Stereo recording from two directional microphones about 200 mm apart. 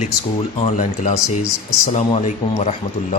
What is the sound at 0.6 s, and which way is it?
Speech, 35° left (ahead or behind).